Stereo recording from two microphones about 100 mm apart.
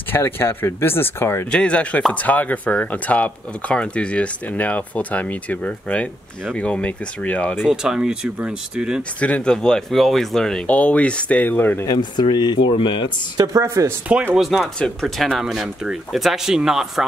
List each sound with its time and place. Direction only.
0.1 s speech: 20° left (ahead or behind)
1.5 s speech: 10° left (ahead or behind)
7.6 s speech: 5° right (ahead or behind)
9.2 s speech: 10° left (ahead or behind)
11.8 s speech: 45° left (ahead or behind)
13.4 s a woman's voice: 35° right (ahead or behind)
14.3 s speech: centre (ahead or behind)